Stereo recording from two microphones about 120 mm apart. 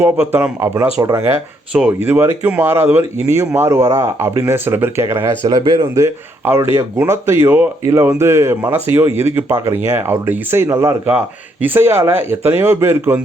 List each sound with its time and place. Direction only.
0.0 s speech: 15° right (ahead or behind)
1.7 s speech: 10° right (ahead or behind)
5.5 s speech: 35° right (ahead or behind); by 13.1 s 20° right (ahead or behind)